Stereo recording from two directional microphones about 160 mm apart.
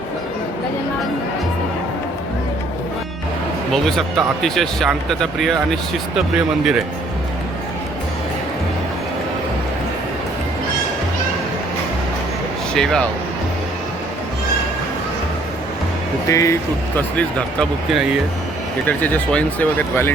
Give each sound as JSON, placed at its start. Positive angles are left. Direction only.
{"t": 3.7, "sound": "speech", "side_deg": 0}
{"t": 12.7, "sound": "speech", "side_deg": 5}
{"t": 16.3, "sound": "speech", "side_deg": 20}
{"t": 17.2, "sound": "speech", "side_deg": 5}